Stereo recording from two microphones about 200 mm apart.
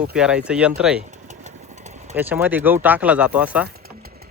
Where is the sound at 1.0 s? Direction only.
40° right (ahead or behind).